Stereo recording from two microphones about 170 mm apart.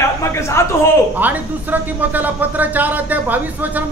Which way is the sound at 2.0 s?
10° right (ahead or behind).